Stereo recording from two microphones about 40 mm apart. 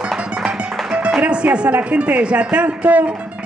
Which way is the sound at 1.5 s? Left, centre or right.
Right.